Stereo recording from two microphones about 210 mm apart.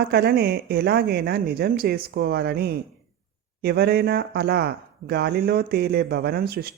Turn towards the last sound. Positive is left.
turn(degrees=-45)  # may be behind; listen again after turning